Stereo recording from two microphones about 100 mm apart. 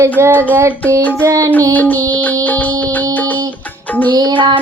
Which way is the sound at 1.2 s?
30° right (ahead or behind).